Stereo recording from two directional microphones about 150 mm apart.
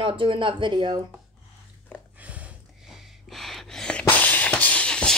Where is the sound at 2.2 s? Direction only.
10° right (ahead or behind).